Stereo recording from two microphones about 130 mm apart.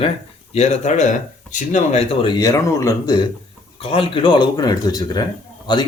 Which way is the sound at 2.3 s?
30° left (ahead or behind).